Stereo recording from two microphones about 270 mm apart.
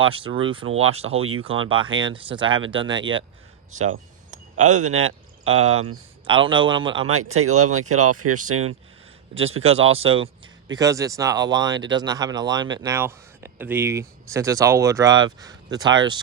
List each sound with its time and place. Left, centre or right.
0.0 s speech: centre
3.7 s a sound: right
4.9 s speech: right
6.2 s speech: centre
7.1 s speech: right
9.3 s speech: right